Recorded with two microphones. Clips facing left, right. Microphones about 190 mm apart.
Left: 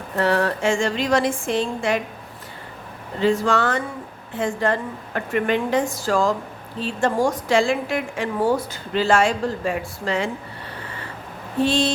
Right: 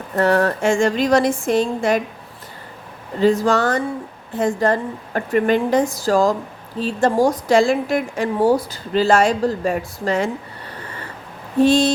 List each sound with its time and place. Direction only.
0.2 s a woman's voice: 45° right (ahead or behind)
3.2 s a woman's voice: 40° right (ahead or behind)
11.6 s a woman's voice: 45° right (ahead or behind)